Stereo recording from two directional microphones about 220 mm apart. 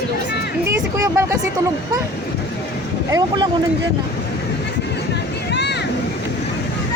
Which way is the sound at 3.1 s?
15° right (ahead or behind).